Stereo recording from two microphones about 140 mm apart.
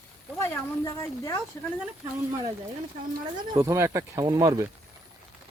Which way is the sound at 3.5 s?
20° right (ahead or behind).